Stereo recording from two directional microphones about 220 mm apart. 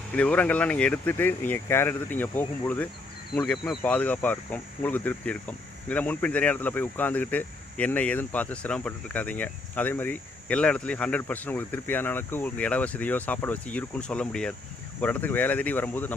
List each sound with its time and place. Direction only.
0.1 s speech: 5° left (ahead or behind)